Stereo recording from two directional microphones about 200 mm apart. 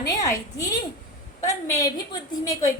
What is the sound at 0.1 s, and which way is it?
Speech, 15° left (ahead or behind).